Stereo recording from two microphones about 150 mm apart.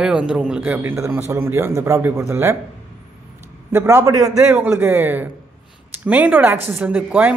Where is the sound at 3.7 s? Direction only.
15° right (ahead or behind).